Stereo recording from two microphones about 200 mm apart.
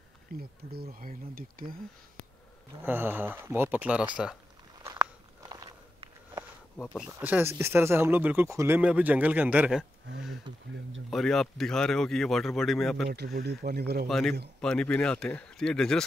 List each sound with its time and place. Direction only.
0.4 s speech: 50° right (ahead or behind)
2.8 s speech: 10° right (ahead or behind)
4.8 s walk: 20° right (ahead or behind)
7.0 s speech: 5° right (ahead or behind)
11.1 s speech: centre (ahead or behind)
13.1 s speech: 55° right (ahead or behind)
14.0 s speech: centre (ahead or behind)